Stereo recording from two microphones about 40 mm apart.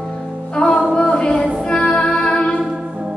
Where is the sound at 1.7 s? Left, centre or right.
Centre.